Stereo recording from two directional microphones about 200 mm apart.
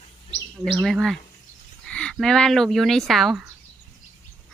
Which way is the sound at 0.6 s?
Centre (ahead or behind).